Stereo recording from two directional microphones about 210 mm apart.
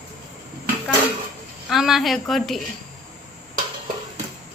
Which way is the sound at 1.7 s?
Centre (ahead or behind).